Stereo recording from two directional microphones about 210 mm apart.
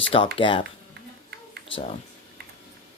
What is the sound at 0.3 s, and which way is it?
Speech, 25° left (ahead or behind).